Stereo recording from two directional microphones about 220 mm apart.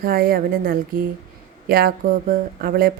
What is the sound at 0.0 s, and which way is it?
Speech, 40° right (ahead or behind).